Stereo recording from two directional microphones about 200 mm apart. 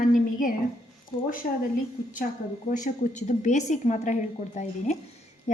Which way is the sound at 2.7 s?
35° left (ahead or behind).